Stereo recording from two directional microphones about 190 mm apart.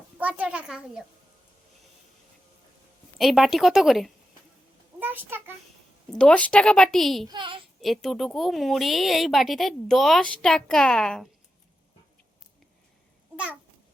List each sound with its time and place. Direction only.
0.2 s a child's voice: 5° right (ahead or behind)
3.2 s a woman's voice: centre (ahead or behind)
4.9 s a sound: 10° right (ahead or behind)
6.1 s a woman's voice: 5° left (ahead or behind)
7.3 s a child's voice: 25° right (ahead or behind)
7.8 s a woman's voice: centre (ahead or behind)
13.3 s babbling: 5° right (ahead or behind)